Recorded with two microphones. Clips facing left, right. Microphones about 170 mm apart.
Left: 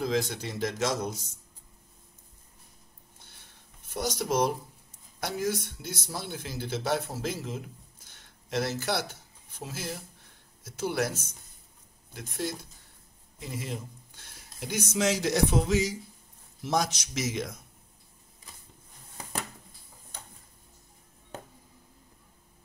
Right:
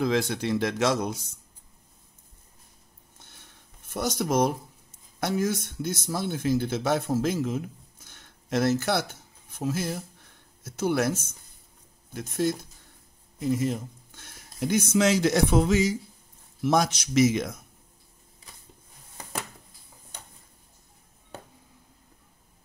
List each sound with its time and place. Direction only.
0.0 s speech: 65° right (ahead or behind)
3.9 s speech: 50° right (ahead or behind)
8.0 s a sound: 50° right (ahead or behind)
9.6 s speech: 50° right (ahead or behind)
13.4 s speech: 45° right (ahead or behind)
16.6 s speech: 60° right (ahead or behind)